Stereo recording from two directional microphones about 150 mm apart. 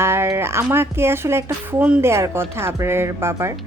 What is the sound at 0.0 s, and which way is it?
A woman's voice, 15° right (ahead or behind).